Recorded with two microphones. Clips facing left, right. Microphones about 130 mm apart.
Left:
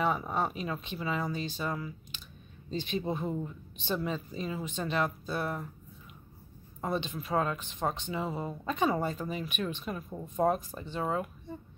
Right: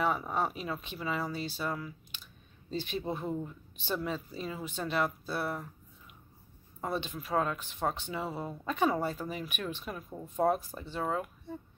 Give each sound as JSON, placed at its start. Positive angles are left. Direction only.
{"t": 0.3, "sound": "speech", "side_deg": -10}
{"t": 6.8, "sound": "speech", "side_deg": -10}